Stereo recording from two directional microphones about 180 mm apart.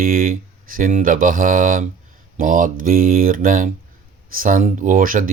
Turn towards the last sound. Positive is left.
turn(degrees=-50)  # may be behind; listen again after turning